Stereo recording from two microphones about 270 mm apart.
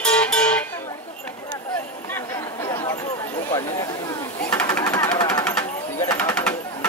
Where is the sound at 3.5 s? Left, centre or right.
Centre.